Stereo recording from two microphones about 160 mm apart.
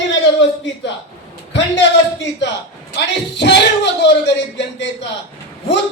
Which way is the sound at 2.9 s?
90° left.